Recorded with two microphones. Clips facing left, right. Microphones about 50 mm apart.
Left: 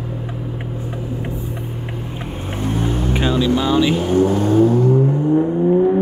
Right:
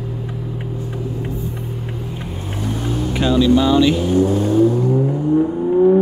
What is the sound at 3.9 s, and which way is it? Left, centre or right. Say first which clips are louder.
Vehicle: even; left.